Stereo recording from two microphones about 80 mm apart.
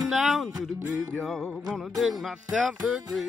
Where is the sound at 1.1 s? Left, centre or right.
Centre.